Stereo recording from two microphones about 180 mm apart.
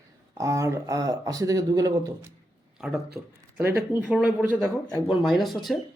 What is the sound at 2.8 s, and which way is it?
Speech, 5° right (ahead or behind).